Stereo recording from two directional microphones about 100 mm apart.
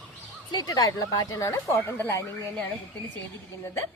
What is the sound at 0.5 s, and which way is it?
Speech, 40° left (ahead or behind).